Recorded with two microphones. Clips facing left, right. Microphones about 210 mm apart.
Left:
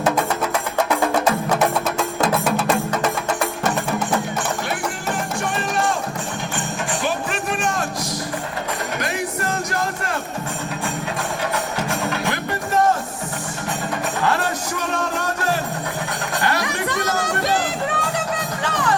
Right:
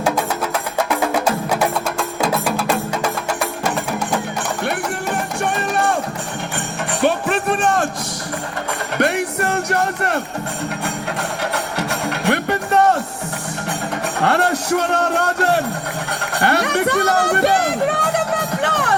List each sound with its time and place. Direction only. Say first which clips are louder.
0.9 s music: even; 5° right (ahead or behind)
5.4 s music: right 4 dB; 60° right (ahead or behind)
9.0 s music: right 11 dB; 65° right (ahead or behind)
11.5 s music: right 1 dB; 70° right (ahead or behind)
14.2 s music: right 6 dB; 65° right (ahead or behind)